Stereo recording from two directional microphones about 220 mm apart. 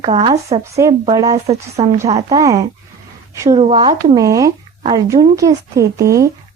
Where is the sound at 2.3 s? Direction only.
15° right (ahead or behind).